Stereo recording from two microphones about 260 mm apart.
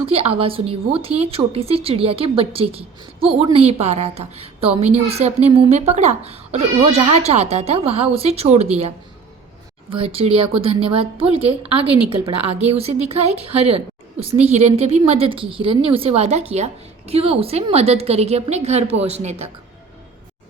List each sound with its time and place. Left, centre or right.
0.0 s a woman's voice: right
9.9 s a woman's voice: right
11.9 s a woman's voice: right
12.5 s a woman's voice: right